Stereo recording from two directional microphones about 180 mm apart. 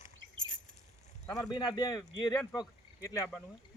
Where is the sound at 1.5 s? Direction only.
20° left (ahead or behind).